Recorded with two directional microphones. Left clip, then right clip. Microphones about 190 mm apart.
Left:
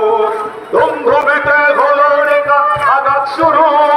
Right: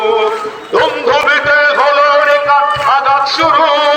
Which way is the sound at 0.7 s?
50° left (ahead or behind).